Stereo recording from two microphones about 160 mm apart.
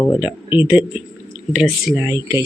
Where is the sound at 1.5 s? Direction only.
5° right (ahead or behind).